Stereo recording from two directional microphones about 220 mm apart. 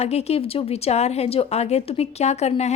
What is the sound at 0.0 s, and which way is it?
Speech, 30° left (ahead or behind).